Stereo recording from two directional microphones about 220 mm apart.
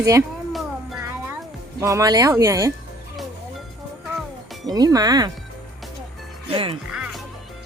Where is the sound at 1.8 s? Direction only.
15° right (ahead or behind).